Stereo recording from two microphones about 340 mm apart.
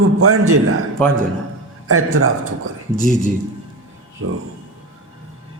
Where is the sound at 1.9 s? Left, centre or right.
Right.